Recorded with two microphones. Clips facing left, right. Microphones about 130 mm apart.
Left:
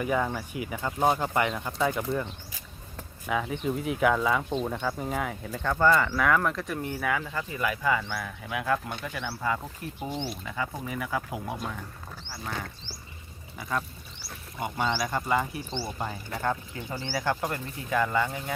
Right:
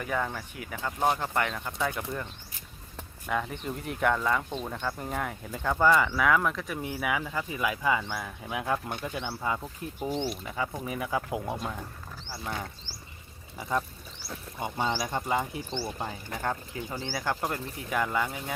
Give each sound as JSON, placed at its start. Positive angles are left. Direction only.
{"t": 0.0, "sound": "speech", "side_deg": 10}
{"t": 3.2, "sound": "speech", "side_deg": 0}
{"t": 13.6, "sound": "speech", "side_deg": -20}